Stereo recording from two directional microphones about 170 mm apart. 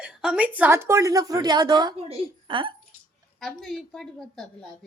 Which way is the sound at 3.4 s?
Centre (ahead or behind).